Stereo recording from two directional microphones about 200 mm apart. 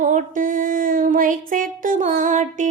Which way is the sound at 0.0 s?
40° right (ahead or behind).